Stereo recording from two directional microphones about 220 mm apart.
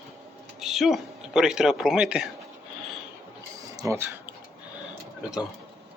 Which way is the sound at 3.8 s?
15° right (ahead or behind).